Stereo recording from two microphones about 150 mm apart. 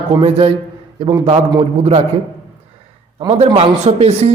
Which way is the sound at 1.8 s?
50° right (ahead or behind).